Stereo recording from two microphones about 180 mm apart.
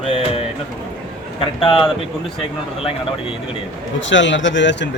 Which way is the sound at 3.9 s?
90° left.